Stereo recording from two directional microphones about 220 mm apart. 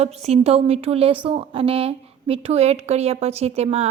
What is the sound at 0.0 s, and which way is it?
A woman's voice, 30° right (ahead or behind).